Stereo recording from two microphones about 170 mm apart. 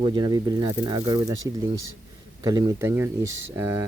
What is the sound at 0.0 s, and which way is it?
Speech, 25° right (ahead or behind).